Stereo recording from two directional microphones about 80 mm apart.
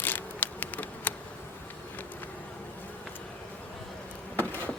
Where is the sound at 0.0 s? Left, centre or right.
Left.